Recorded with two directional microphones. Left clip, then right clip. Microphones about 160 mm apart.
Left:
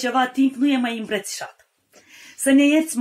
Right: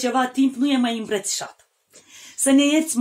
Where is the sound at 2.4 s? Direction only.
30° right (ahead or behind).